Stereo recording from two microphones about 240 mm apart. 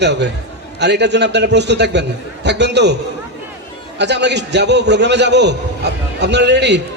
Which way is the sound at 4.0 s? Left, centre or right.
Right.